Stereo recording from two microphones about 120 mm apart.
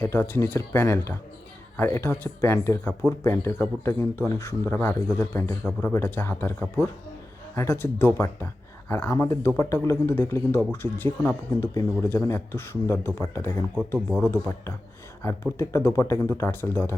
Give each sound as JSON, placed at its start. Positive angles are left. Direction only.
{"t": 0.0, "sound": "speech", "side_deg": 15}